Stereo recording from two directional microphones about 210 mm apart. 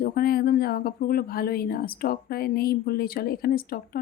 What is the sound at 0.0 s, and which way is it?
Speech, 45° left (ahead or behind).